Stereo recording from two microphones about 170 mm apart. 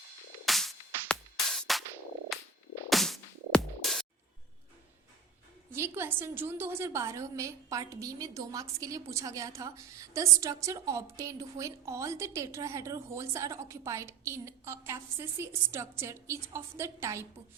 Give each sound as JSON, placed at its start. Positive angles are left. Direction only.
{"t": 0.4, "sound": "music", "side_deg": 0}
{"t": 5.7, "sound": "a woman's voice", "side_deg": -15}